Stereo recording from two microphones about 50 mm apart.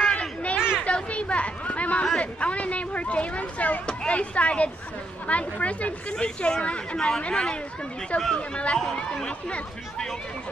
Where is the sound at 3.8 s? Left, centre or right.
Left.